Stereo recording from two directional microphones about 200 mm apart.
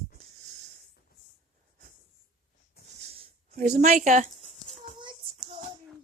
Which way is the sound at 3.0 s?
30° right (ahead or behind).